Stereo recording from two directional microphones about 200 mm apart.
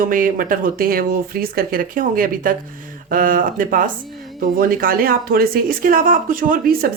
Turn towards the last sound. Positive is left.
turn(degrees=-45)  # may be behind; listen again after turning